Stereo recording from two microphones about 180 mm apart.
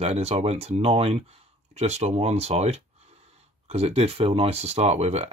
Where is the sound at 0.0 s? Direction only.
35° right (ahead or behind).